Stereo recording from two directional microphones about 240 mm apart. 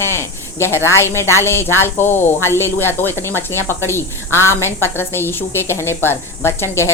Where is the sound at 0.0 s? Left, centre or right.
Centre.